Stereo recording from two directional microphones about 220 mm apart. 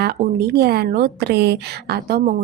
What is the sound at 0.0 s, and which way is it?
A woman's voice, 45° right (ahead or behind).